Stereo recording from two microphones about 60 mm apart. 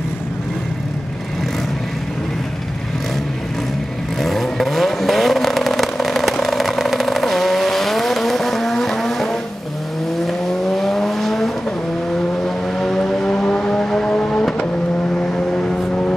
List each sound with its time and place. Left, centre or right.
4.2 s vehicle: centre